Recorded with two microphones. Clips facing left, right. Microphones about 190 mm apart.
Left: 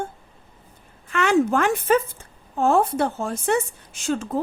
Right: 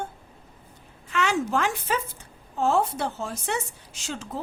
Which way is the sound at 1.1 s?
55° left (ahead or behind).